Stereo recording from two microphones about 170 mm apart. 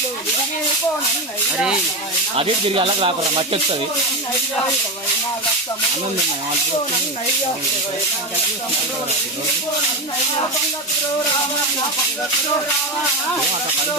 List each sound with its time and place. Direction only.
2.3 s speech: 35° right (ahead or behind)